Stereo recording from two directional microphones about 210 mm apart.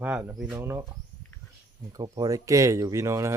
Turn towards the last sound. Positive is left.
turn(degrees=-15)  # may be behind; listen again after turning